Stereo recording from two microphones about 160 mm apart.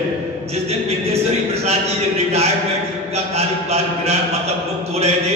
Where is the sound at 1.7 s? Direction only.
40° right (ahead or behind).